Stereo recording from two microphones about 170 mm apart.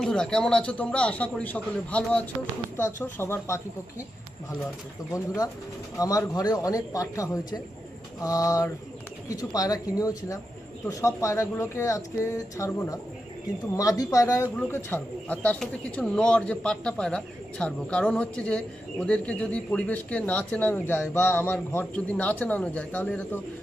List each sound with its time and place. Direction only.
0.0 s a man's voice: 5° left (ahead or behind)
6.0 s a man's voice: 20° left (ahead or behind)